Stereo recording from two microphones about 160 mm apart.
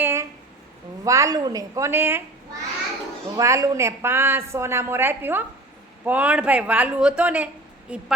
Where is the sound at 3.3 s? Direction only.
20° right (ahead or behind).